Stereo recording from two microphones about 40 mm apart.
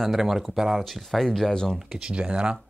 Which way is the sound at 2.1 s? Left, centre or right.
Right.